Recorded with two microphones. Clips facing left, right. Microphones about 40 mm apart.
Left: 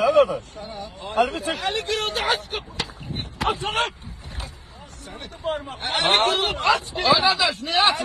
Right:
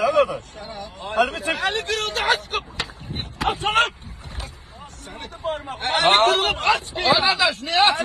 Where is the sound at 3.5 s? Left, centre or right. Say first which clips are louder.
Right 5 dB; right.